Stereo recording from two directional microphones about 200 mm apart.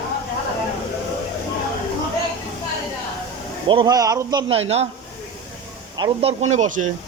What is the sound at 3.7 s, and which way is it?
Speech, 20° right (ahead or behind).